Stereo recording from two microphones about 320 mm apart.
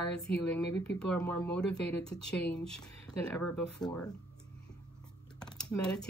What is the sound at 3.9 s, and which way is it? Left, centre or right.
Speech, centre.